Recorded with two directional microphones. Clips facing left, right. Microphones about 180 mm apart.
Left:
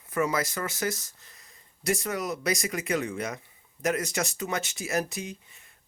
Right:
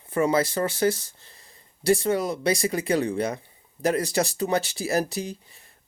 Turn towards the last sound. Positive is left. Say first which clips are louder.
# right 6 dB
turn(degrees=-35)  # may be behind; listen again after turning